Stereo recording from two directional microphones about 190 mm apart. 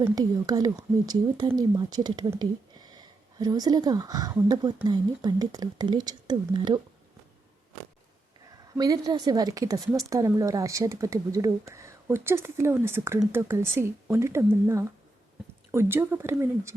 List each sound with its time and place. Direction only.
0.0 s speech: 20° right (ahead or behind)
8.8 s a woman's voice: 20° right (ahead or behind)